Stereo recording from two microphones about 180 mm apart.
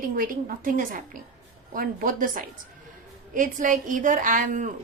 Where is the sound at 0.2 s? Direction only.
50° right (ahead or behind).